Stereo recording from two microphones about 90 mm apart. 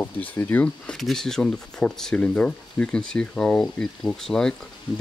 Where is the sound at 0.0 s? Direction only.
20° left (ahead or behind).